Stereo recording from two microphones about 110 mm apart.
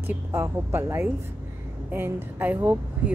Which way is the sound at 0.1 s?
20° right (ahead or behind).